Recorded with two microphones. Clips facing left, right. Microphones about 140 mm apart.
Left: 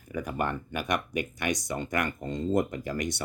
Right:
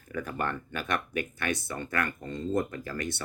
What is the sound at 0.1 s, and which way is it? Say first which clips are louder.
Speech: left 2 dB; 15° left (ahead or behind).